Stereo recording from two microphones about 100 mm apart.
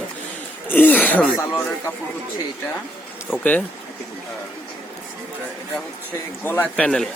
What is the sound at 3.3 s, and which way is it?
Speech, 15° left (ahead or behind).